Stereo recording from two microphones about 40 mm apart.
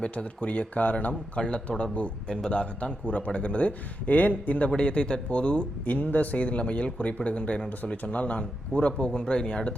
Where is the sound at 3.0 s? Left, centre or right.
Left.